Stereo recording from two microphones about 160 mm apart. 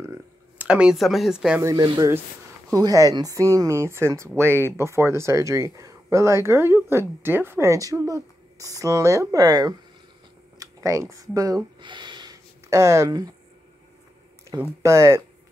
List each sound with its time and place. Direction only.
0.6 s speech: 5° right (ahead or behind)
1.6 s speech: 25° right (ahead or behind)
14.6 s speech: 15° right (ahead or behind)